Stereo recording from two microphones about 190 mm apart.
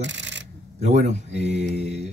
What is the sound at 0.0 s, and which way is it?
Coin, 70° right (ahead or behind).